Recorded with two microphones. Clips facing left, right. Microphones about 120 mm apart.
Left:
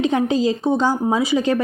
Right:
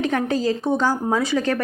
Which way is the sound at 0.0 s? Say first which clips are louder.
Left 3 dB; 20° left (ahead or behind).